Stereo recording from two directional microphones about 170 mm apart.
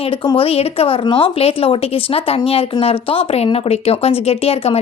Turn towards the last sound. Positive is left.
turn(degrees=35)  # may be behind; listen again after turning